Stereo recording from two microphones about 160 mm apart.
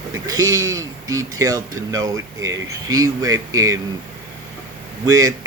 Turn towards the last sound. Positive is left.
turn(degrees=-20)  # may be behind; listen again after turning